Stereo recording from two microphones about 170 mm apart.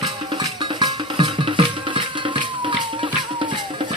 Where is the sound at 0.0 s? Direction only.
25° right (ahead or behind).